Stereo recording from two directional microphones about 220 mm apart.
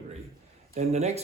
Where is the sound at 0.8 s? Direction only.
30° right (ahead or behind).